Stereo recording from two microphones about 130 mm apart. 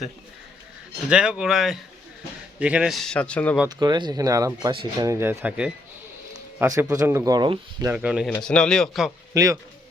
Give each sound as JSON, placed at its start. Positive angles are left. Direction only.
{"t": 1.1, "sound": "speech", "side_deg": -5}
{"t": 3.7, "sound": "speech", "side_deg": -30}
{"t": 6.6, "sound": "speech", "side_deg": -25}
{"t": 7.3, "sound": "speech", "side_deg": -35}
{"t": 7.9, "sound": "speech", "side_deg": -10}
{"t": 8.4, "sound": "speech", "side_deg": 5}
{"t": 9.3, "sound": "speech", "side_deg": -25}